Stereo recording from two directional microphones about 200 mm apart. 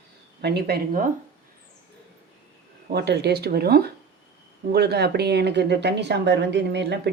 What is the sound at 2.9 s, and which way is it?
Speech, 55° right (ahead or behind).